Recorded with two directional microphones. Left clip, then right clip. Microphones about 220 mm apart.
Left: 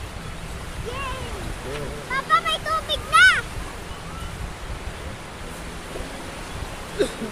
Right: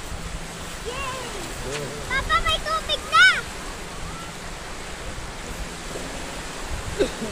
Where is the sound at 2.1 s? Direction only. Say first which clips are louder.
Left 1 dB; 10° left (ahead or behind).